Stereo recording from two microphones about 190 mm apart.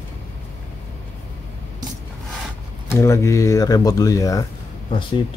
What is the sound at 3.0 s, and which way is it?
Speech, 15° left (ahead or behind).